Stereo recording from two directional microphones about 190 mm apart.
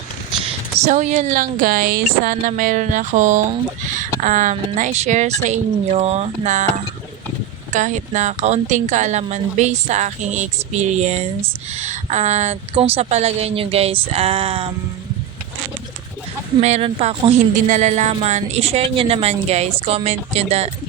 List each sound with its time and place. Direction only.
0.9 s speech: 40° right (ahead or behind)
7.7 s speech: 40° right (ahead or behind)
16.6 s speech: 35° right (ahead or behind)